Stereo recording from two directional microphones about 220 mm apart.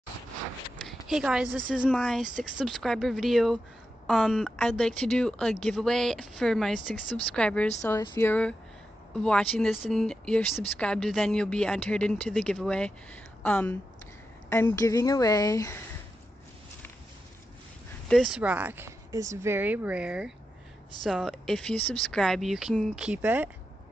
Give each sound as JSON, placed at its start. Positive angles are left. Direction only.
{"t": 0.7, "sound": "a sound", "side_deg": 0}
{"t": 1.9, "sound": "speech", "side_deg": 5}
{"t": 2.2, "sound": "speech", "side_deg": -35}
{"t": 2.5, "sound": "speech", "side_deg": 0}
{"t": 6.8, "sound": "speech", "side_deg": -35}
{"t": 7.3, "sound": "a woman's voice", "side_deg": 5}
{"t": 18.0, "sound": "speech", "side_deg": 0}